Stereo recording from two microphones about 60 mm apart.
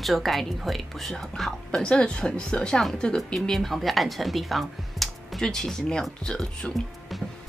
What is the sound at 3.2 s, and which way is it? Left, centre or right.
Speech, centre.